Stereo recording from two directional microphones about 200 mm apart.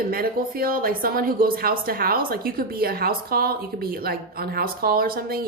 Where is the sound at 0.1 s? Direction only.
45° right (ahead or behind).